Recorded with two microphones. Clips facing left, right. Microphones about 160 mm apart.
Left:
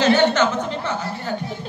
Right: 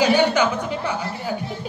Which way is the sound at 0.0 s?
10° right (ahead or behind).